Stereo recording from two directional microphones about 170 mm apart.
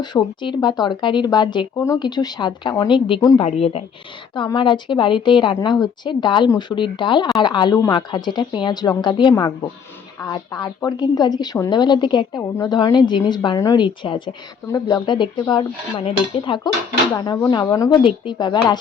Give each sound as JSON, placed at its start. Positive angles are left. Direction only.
{"t": 0.0, "sound": "speech", "side_deg": 25}
{"t": 3.4, "sound": "speech", "side_deg": 35}